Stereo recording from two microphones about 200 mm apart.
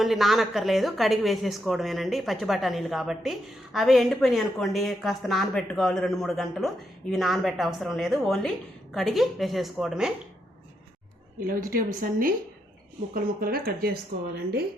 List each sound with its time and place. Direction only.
0.0 s speech: centre (ahead or behind)
11.3 s a woman's voice: 45° right (ahead or behind)